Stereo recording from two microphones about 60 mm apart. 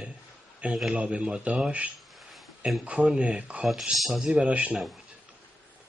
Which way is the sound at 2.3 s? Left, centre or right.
Centre.